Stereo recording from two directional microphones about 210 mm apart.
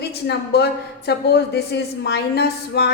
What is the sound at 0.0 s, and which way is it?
A woman's voice, 50° left (ahead or behind).